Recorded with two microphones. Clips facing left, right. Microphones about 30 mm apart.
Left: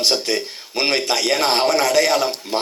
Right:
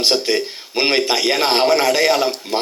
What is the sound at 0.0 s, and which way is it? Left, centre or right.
A man's voice, centre.